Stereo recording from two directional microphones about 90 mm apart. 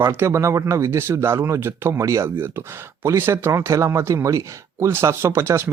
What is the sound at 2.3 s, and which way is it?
Speech, 25° right (ahead or behind).